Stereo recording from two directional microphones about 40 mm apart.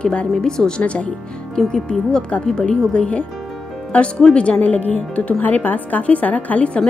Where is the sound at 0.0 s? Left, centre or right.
Left.